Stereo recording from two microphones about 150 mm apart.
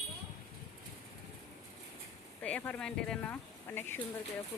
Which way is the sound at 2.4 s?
10° left (ahead or behind).